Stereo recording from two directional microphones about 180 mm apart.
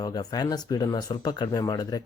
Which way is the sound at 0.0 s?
20° left (ahead or behind).